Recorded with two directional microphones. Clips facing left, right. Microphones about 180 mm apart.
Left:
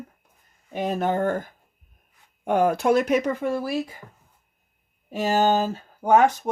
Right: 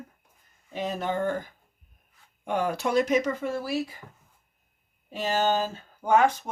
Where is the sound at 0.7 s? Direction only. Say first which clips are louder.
Left 5 dB; 55° left (ahead or behind).